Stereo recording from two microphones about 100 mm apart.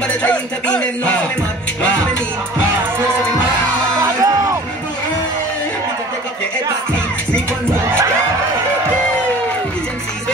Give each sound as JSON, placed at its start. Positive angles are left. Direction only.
{"t": 0.2, "sound": "music", "side_deg": 10}
{"t": 4.2, "sound": "music", "side_deg": -35}